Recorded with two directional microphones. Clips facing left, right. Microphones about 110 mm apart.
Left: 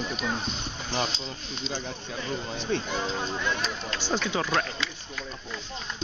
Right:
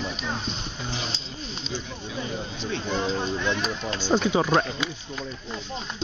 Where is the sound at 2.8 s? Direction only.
Centre (ahead or behind).